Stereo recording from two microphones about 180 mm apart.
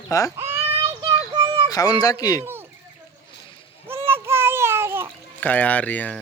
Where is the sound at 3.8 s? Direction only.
15° right (ahead or behind).